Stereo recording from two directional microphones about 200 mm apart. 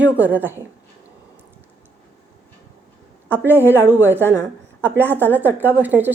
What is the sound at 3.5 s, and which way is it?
Speech, 10° right (ahead or behind).